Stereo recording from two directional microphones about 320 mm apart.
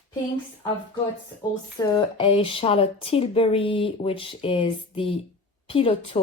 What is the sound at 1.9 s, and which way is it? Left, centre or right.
Speech, centre.